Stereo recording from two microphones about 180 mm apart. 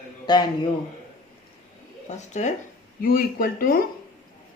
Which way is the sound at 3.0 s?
55° left (ahead or behind).